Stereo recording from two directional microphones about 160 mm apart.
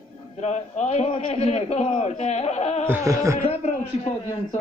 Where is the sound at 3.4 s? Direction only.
40° left (ahead or behind).